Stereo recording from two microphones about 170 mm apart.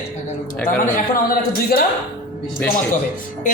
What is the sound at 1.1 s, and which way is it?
Speech, 60° left (ahead or behind).